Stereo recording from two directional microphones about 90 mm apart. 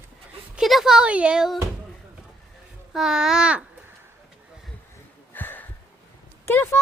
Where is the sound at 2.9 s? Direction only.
5° right (ahead or behind).